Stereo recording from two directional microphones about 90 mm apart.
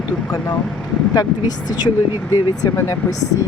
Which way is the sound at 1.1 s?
45° left (ahead or behind).